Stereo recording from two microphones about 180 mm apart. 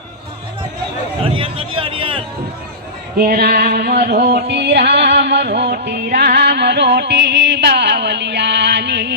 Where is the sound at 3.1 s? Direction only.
60° right (ahead or behind).